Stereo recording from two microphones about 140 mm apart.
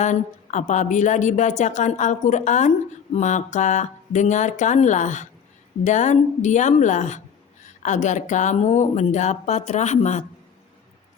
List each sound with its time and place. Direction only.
0.0 s a woman's voice: 60° left (ahead or behind)